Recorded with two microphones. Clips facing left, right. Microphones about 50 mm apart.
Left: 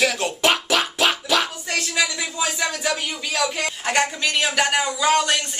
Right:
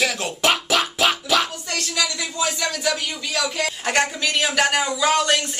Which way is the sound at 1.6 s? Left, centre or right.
Centre.